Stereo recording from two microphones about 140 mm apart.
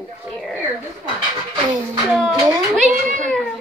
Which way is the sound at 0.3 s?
Centre (ahead or behind).